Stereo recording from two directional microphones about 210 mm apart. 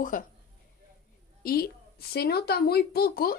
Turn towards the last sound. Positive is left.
turn(degrees=45)  # may be behind; listen again after turning